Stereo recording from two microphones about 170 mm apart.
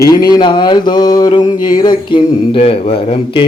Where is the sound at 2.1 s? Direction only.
30° left (ahead or behind).